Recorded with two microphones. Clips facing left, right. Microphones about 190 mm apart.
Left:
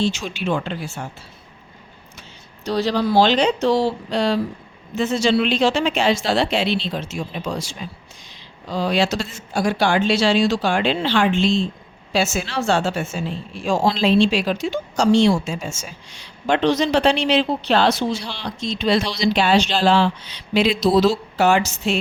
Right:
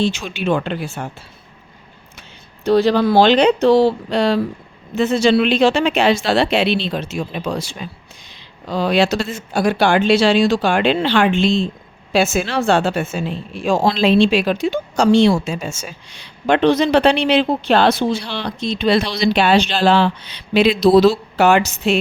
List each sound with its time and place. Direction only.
0.0 s a woman's voice: 60° right (ahead or behind)
2.6 s a woman's voice: 55° right (ahead or behind)